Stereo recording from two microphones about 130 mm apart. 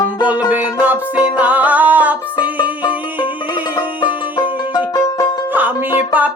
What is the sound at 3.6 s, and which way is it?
Music, 35° left (ahead or behind).